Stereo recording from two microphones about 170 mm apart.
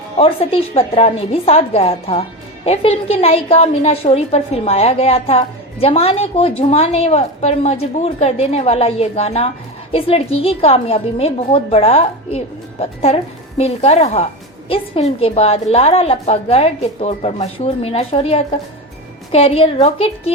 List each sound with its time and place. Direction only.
0.2 s a woman's voice: 35° left (ahead or behind)